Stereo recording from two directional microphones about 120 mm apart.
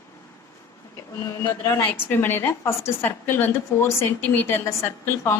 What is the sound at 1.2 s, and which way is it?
Speech, 25° left (ahead or behind).